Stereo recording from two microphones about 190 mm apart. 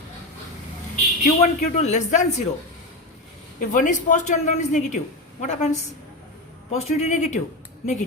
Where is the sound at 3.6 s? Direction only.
45° left (ahead or behind).